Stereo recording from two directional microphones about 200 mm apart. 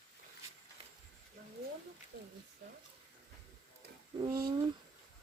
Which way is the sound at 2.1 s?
50° right (ahead or behind).